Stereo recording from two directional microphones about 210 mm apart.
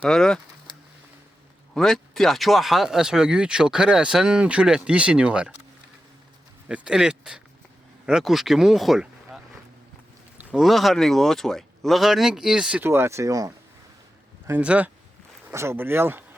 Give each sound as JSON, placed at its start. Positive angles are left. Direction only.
{"t": 0.0, "sound": "speech", "side_deg": 5}
{"t": 1.7, "sound": "speech", "side_deg": 0}
{"t": 6.7, "sound": "speech", "side_deg": -5}